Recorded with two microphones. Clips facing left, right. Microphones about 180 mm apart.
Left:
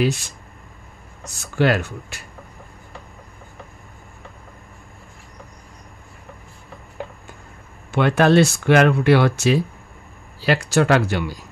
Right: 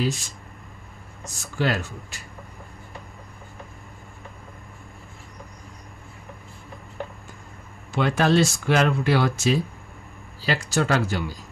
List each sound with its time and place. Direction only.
0.0 s speech: 70° left (ahead or behind)
7.9 s speech: 65° left (ahead or behind)